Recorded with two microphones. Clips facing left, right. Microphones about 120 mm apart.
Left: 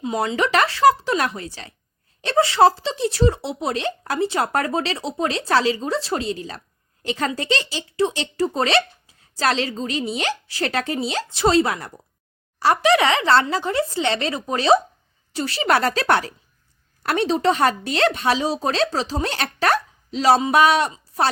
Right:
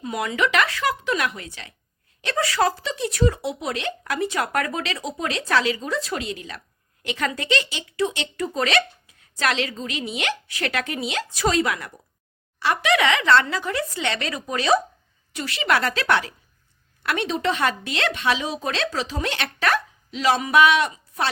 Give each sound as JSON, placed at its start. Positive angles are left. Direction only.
{"t": 0.0, "sound": "speech", "side_deg": 25}